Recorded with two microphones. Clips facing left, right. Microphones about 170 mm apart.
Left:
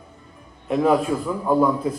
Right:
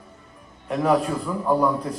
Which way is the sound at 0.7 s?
5° left (ahead or behind).